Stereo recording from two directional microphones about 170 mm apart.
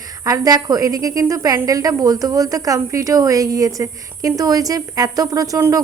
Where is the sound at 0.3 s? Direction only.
20° right (ahead or behind).